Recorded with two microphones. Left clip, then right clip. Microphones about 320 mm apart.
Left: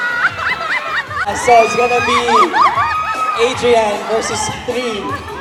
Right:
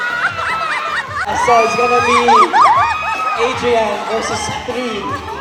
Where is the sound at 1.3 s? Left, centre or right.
Left.